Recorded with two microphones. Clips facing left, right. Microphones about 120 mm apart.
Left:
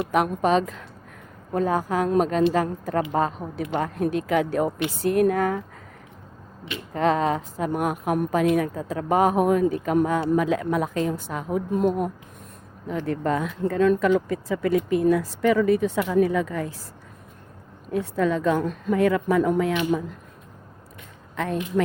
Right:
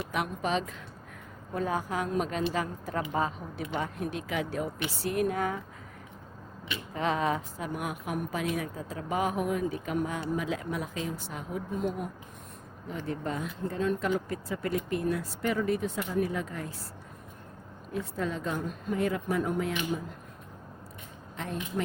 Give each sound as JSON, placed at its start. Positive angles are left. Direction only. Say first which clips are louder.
{"t": 0.1, "sound": "a woman's voice", "louder": "left 10 dB", "side_deg": 50}
{"t": 6.9, "sound": "a woman's voice", "louder": "left 7 dB", "side_deg": 45}
{"t": 12.9, "sound": "speech", "louder": "left 9 dB", "side_deg": 65}
{"t": 17.9, "sound": "speech", "louder": "left 10 dB", "side_deg": 90}
{"t": 21.3, "sound": "speech", "louder": "left 9 dB", "side_deg": 75}